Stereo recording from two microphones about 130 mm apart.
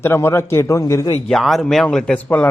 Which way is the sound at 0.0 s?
20° left (ahead or behind).